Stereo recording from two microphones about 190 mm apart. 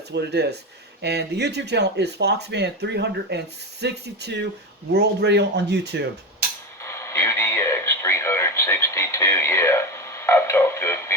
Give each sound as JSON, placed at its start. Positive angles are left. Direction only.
{"t": 0.1, "sound": "speech", "side_deg": -60}
{"t": 6.8, "sound": "radio", "side_deg": 15}